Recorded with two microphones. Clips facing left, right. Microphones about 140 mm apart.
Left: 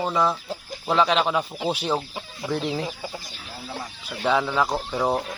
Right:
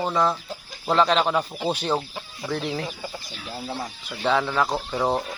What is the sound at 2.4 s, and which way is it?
Speech, 15° left (ahead or behind).